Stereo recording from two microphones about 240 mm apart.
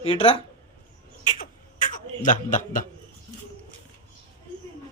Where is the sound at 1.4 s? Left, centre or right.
Left.